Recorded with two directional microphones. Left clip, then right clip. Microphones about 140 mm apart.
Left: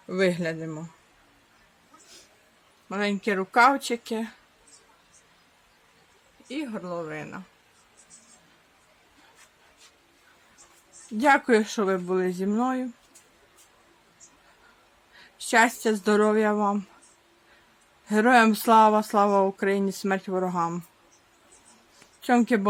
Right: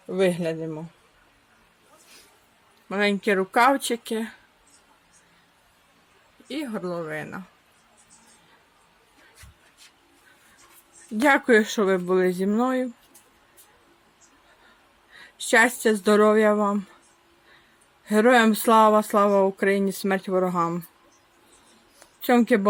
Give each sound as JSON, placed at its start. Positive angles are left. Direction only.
{"t": 0.1, "sound": "speech", "side_deg": 5}
{"t": 2.9, "sound": "speech", "side_deg": -20}
{"t": 6.5, "sound": "speech", "side_deg": -35}
{"t": 11.2, "sound": "speech", "side_deg": -20}
{"t": 15.4, "sound": "speech", "side_deg": -15}
{"t": 18.1, "sound": "speech", "side_deg": -10}
{"t": 22.2, "sound": "speech", "side_deg": -15}